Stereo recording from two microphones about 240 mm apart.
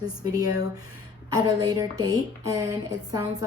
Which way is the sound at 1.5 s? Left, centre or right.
Centre.